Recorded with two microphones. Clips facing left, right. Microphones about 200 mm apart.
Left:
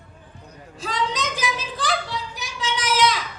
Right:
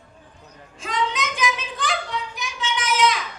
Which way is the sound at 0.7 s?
35° left (ahead or behind).